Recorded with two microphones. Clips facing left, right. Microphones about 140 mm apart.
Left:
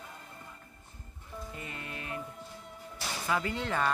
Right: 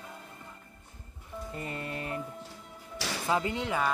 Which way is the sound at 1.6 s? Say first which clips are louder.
Right 6 dB; 35° right (ahead or behind).